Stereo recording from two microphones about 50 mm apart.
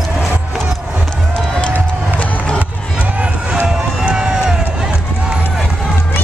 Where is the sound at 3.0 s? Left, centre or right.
Right.